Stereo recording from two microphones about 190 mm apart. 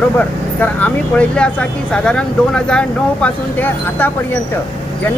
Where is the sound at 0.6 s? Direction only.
10° left (ahead or behind).